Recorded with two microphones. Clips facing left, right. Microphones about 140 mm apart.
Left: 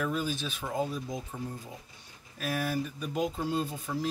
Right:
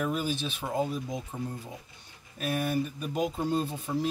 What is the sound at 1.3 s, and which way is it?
Speech, 20° right (ahead or behind).